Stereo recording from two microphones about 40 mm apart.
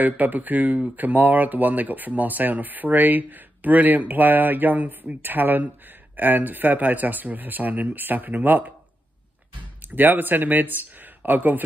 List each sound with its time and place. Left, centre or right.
0.0 s speech: right
9.9 s speech: right